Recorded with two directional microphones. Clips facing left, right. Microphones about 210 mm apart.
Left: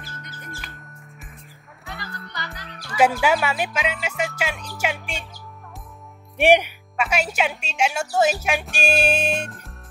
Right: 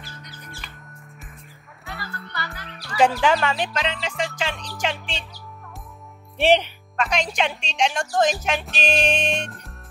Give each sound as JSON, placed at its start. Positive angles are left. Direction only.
{"t": 2.0, "sound": "music", "side_deg": 0}
{"t": 2.3, "sound": "music", "side_deg": 15}
{"t": 3.2, "sound": "a woman's voice", "side_deg": 10}
{"t": 6.3, "sound": "a woman's voice", "side_deg": 15}